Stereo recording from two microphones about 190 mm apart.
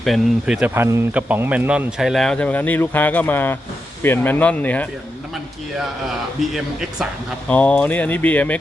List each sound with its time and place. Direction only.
0.0 s speech: centre (ahead or behind)